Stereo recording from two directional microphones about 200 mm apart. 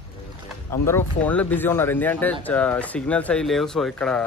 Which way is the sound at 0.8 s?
10° left (ahead or behind).